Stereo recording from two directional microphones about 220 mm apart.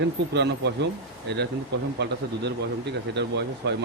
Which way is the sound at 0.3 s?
50° right (ahead or behind).